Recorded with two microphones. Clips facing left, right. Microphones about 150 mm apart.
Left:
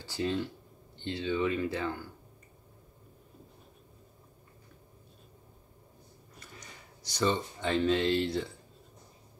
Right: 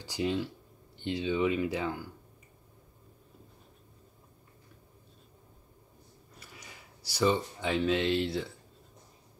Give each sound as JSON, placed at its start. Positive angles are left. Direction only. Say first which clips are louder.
{"t": 0.0, "sound": "speech", "louder": "right 1 dB", "side_deg": -15}
{"t": 6.4, "sound": "speech", "louder": "left 1 dB", "side_deg": -10}